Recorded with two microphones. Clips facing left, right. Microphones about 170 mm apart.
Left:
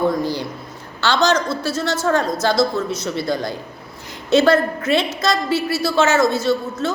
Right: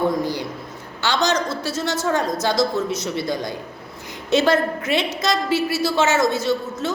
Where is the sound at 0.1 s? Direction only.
20° right (ahead or behind).